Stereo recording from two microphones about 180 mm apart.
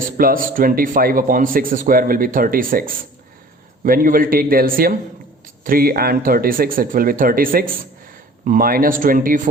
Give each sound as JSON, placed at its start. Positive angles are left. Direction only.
{"t": 0.2, "sound": "speech", "side_deg": -50}